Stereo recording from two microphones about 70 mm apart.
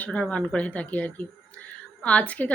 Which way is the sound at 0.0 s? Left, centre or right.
Centre.